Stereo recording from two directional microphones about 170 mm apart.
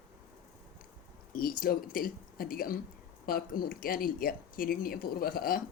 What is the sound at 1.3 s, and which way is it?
Speech, 55° left (ahead or behind).